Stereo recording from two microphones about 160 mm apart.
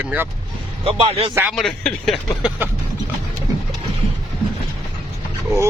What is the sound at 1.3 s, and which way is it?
Speech, 10° right (ahead or behind).